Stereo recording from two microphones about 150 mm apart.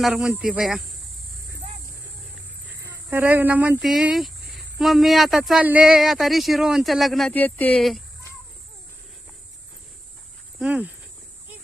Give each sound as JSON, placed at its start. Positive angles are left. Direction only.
{"t": 0.0, "sound": "speech", "side_deg": -5}
{"t": 2.7, "sound": "speech", "side_deg": -20}
{"t": 10.6, "sound": "speech", "side_deg": -10}